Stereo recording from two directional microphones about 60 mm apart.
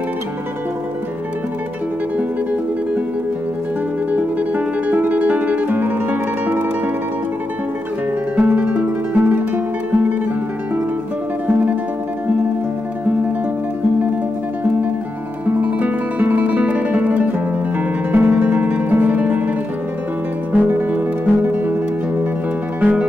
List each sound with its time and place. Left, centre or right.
4.1 s music: right
8.4 s music: right
15.4 s guitar: right
18.4 s music: right
20.5 s music: right
22.8 s music: right